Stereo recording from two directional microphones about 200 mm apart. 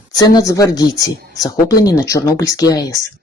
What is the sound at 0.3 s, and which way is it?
Speech, 20° left (ahead or behind).